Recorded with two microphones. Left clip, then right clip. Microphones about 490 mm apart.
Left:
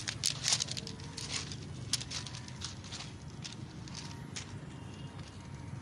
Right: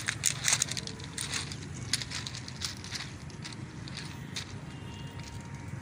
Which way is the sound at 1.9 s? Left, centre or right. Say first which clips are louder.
Right 3 dB; left.